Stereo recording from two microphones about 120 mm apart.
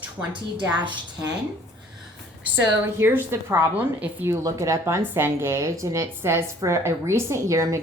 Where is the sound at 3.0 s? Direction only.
20° right (ahead or behind).